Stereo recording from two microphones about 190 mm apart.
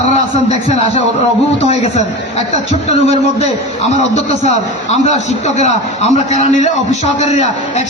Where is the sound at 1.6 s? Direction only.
35° left (ahead or behind).